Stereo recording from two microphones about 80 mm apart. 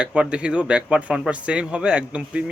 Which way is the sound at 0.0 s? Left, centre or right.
Centre.